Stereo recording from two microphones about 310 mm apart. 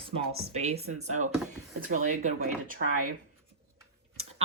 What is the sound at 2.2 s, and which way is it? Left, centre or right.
Speech, right.